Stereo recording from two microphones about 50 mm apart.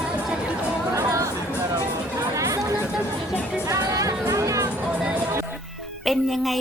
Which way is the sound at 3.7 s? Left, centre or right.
Right.